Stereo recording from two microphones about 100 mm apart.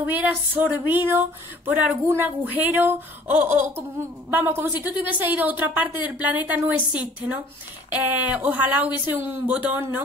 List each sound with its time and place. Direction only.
0.1 s a woman's voice: 15° right (ahead or behind)